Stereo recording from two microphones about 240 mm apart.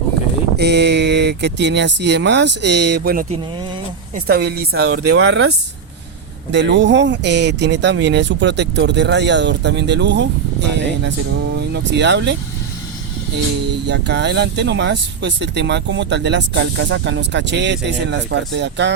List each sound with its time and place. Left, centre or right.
0.5 s speech: right
6.5 s speech: right
13.8 s speech: right